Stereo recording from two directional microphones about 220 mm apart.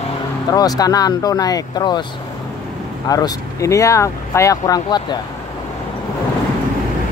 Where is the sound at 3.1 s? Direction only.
15° left (ahead or behind).